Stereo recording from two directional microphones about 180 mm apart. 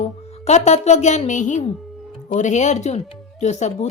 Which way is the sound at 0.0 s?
40° left (ahead or behind).